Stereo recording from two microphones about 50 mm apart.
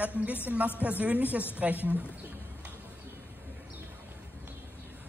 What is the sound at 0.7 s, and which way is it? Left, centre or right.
A woman's voice, right.